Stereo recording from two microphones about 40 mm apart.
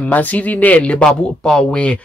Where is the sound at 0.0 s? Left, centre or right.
Left.